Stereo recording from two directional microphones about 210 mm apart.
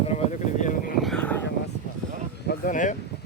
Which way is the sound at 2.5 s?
40° left (ahead or behind).